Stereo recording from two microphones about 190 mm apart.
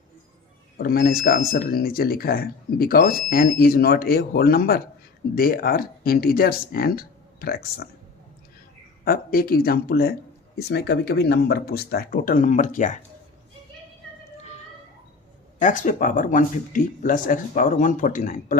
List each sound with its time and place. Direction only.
0.8 s speech: 50° left (ahead or behind)
9.0 s speech: 50° left (ahead or behind)
15.5 s speech: 40° left (ahead or behind)